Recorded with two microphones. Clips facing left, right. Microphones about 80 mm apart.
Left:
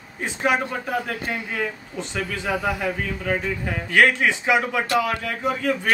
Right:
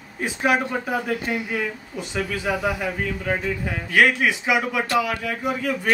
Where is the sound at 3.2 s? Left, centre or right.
Centre.